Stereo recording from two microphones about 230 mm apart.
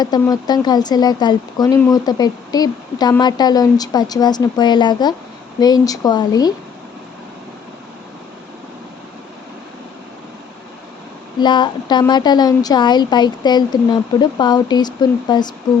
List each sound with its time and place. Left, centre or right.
0.0 s speech: centre
11.3 s a woman's voice: centre